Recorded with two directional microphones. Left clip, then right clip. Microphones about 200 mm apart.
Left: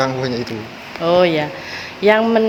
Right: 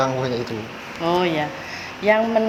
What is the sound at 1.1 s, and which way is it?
Speech, 50° left (ahead or behind).